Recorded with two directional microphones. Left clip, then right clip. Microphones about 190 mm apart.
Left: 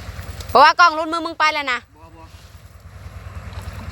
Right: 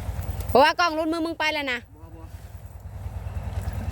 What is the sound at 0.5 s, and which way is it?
Speech, 25° right (ahead or behind).